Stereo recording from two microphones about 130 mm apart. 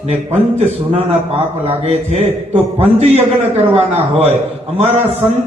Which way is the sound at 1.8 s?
55° right (ahead or behind).